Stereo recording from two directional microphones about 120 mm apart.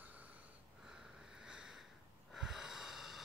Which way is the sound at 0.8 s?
5° right (ahead or behind).